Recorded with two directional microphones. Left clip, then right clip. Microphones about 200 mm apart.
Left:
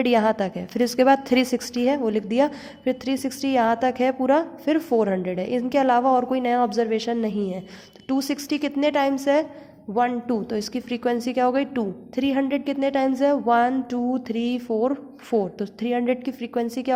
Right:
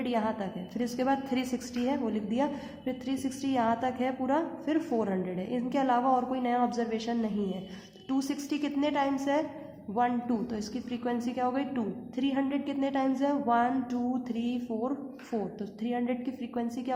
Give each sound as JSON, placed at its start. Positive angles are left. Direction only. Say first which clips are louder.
{"t": 0.0, "sound": "a woman's voice", "louder": "left 11 dB", "side_deg": 45}